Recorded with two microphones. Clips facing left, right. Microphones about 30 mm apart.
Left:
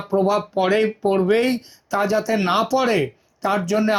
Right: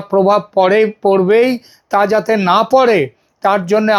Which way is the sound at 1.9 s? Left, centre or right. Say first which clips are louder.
Right 7 dB; right.